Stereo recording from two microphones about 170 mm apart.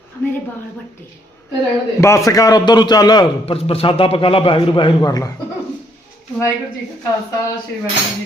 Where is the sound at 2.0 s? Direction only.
15° left (ahead or behind).